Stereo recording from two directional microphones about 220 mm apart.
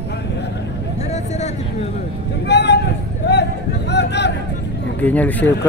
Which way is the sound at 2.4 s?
50° left (ahead or behind).